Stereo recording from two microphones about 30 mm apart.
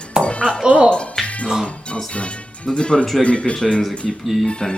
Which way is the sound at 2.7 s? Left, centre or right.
Left.